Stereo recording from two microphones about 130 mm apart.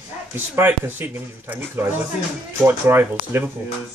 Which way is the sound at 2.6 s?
15° right (ahead or behind).